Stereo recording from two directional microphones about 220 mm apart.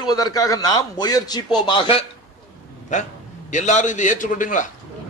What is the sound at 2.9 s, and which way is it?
A man's voice, 35° left (ahead or behind).